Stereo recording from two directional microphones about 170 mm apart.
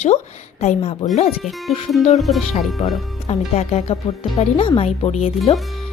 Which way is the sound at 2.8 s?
40° left (ahead or behind).